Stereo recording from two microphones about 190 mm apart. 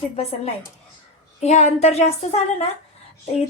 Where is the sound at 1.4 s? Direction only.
35° left (ahead or behind).